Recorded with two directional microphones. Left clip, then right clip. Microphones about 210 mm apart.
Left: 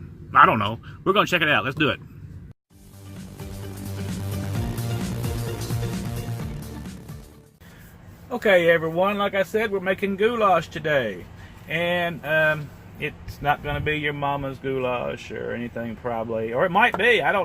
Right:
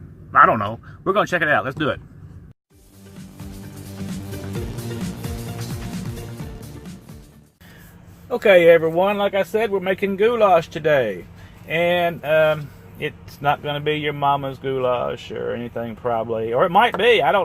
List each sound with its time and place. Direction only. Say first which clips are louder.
0.3 s speech: right 2 dB; 5° left (ahead or behind)
3.2 s music: left 1 dB; centre (ahead or behind)
8.3 s speech: right 6 dB; 65° right (ahead or behind)